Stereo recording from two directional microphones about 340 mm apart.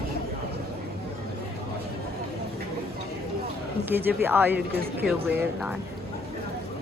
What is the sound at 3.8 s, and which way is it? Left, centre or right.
Speech, centre.